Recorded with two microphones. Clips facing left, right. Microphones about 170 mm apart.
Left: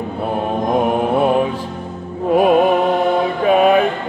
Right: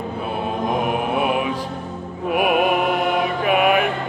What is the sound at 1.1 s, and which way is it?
Music, 40° left (ahead or behind).